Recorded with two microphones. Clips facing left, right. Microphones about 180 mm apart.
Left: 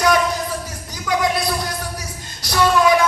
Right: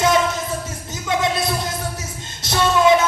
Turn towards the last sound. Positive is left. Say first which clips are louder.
# even
turn(degrees=-25)  # may be behind; listen again after turning